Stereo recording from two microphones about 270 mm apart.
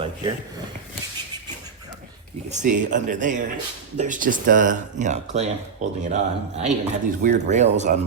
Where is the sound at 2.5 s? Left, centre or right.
Right.